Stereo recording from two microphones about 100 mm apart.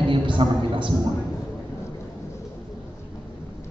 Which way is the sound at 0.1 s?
55° right (ahead or behind).